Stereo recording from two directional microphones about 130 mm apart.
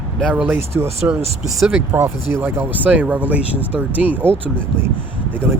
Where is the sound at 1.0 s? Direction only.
15° right (ahead or behind).